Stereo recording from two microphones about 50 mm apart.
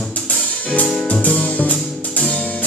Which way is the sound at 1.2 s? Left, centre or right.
Left.